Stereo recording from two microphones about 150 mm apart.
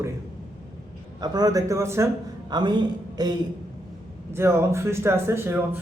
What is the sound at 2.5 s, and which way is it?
A man's voice, 30° right (ahead or behind).